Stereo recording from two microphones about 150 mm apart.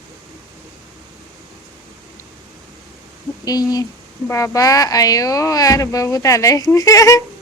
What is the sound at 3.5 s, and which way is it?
Speech, 25° left (ahead or behind).